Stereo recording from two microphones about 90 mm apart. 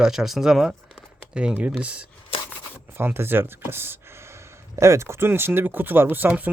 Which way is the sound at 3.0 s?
25° right (ahead or behind).